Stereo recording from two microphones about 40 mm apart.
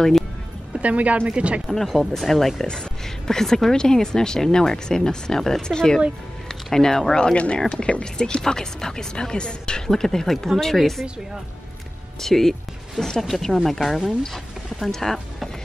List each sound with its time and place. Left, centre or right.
0.7 s speech: right
1.7 s speech: centre
2.6 s speech: centre
7.3 s speech: left
9.8 s speech: centre
12.2 s speech: centre